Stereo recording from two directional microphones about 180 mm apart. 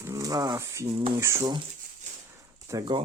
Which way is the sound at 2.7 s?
20° right (ahead or behind).